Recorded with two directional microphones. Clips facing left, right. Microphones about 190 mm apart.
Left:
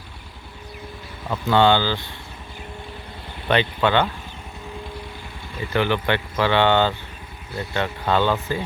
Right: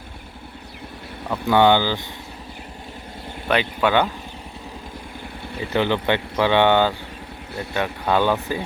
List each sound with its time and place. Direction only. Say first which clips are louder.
1.3 s speech: right 1 dB; 15° right (ahead or behind)
3.5 s speech: even; 5° right (ahead or behind)
5.7 s speech: right 1 dB; 20° right (ahead or behind)